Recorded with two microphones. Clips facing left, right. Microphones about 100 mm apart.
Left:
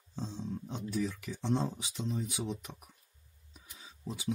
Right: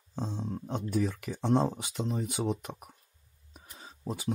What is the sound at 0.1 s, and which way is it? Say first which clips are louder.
Speech: right 4 dB; 55° right (ahead or behind).